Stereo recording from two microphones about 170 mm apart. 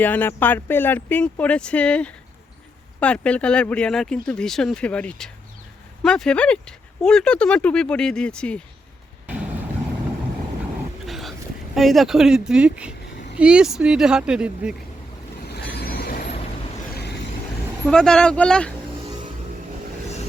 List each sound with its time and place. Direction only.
0.0 s speech: 10° left (ahead or behind)
11.0 s a sound: centre (ahead or behind)
13.4 s speech: 5° right (ahead or behind)
15.4 s train: 75° left (ahead or behind); by 16.2 s 60° left (ahead or behind)
16.9 s vehicle: 75° left (ahead or behind)
17.8 s speech: 5° left (ahead or behind)